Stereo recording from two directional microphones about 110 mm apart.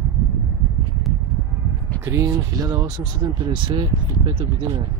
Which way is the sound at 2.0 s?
25° right (ahead or behind).